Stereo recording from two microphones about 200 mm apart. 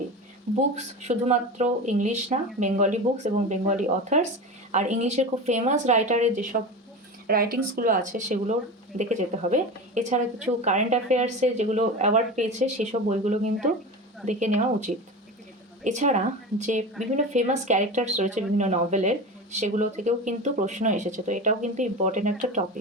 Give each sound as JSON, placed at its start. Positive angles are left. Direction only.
{"t": 0.8, "sound": "speech", "side_deg": -35}